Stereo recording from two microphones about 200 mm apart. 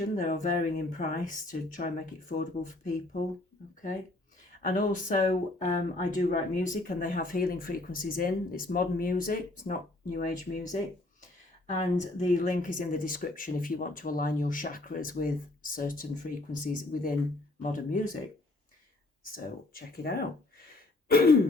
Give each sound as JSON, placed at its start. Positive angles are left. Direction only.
{"t": 0.2, "sound": "speech", "side_deg": 40}
{"t": 4.6, "sound": "speech", "side_deg": 40}
{"t": 11.8, "sound": "speech", "side_deg": 35}
{"t": 19.2, "sound": "speech", "side_deg": 45}